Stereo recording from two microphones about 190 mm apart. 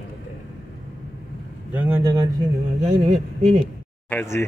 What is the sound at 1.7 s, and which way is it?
Speech, 10° right (ahead or behind).